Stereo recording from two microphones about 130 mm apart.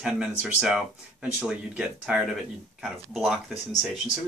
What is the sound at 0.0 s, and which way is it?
Speech, 5° right (ahead or behind).